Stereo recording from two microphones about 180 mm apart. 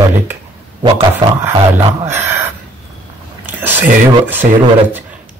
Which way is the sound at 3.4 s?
10° right (ahead or behind).